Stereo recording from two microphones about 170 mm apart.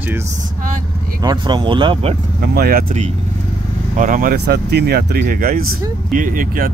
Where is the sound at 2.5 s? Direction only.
65° right (ahead or behind).